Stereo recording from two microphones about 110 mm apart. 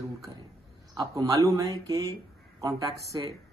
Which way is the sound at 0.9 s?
30° right (ahead or behind).